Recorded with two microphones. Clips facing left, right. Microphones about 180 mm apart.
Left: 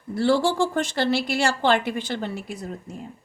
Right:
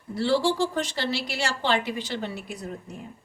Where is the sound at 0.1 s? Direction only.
55° left (ahead or behind).